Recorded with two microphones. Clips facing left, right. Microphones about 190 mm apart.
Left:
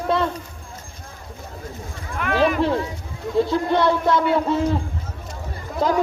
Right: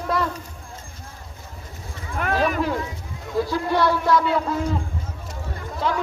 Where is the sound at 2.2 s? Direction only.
40° right (ahead or behind).